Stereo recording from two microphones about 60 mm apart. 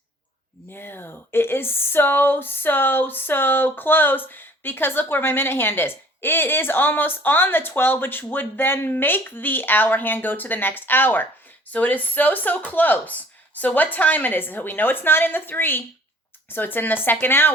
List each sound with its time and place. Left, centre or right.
0.7 s speech: left